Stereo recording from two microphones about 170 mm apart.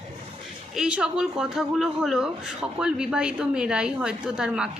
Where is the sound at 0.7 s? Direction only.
5° right (ahead or behind).